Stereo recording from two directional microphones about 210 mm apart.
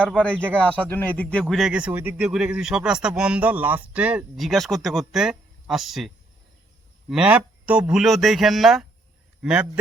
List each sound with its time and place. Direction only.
0.0 s a man's voice: 5° left (ahead or behind)
7.1 s a man's voice: 5° right (ahead or behind)